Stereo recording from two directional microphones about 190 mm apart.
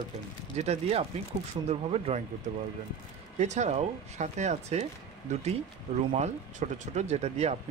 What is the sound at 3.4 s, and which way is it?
Speech, 35° right (ahead or behind).